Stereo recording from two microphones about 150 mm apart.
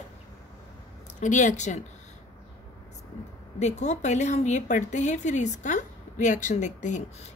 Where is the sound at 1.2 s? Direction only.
55° left (ahead or behind).